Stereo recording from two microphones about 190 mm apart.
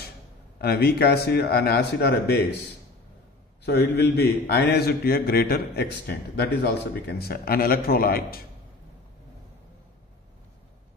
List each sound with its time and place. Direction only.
0.6 s a man's voice: 55° left (ahead or behind)
3.6 s a man's voice: 60° left (ahead or behind)